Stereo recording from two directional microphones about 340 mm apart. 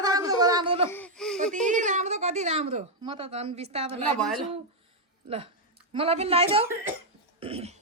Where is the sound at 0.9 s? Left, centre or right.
Centre.